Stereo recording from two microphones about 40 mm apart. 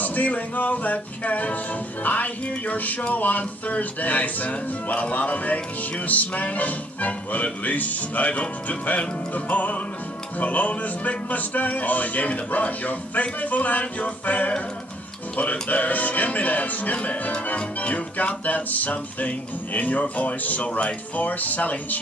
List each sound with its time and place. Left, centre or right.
0.0 s speech: left
17.6 s music: left
18.1 s speech: left